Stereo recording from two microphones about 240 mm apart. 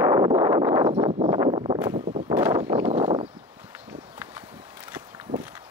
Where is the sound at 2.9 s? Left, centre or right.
Right.